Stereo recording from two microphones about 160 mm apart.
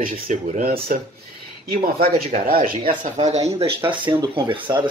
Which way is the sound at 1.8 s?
65° right (ahead or behind).